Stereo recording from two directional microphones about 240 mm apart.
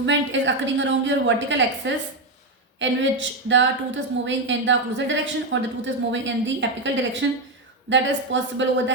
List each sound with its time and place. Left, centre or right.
0.0 s a woman's voice: right